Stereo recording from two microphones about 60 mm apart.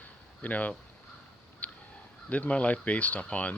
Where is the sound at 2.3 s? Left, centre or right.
Left.